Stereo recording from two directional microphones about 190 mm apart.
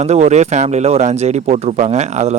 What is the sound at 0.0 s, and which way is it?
Speech, 35° right (ahead or behind).